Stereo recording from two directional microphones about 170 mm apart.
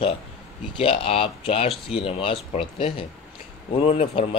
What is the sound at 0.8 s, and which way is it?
Speech, 35° left (ahead or behind).